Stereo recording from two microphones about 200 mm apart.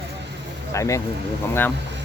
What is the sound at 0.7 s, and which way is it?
Speech, 15° left (ahead or behind).